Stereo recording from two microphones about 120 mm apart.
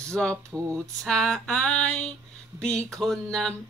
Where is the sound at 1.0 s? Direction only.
5° left (ahead or behind).